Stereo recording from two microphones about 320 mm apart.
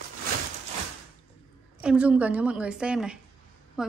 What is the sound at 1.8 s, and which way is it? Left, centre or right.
Speech, centre.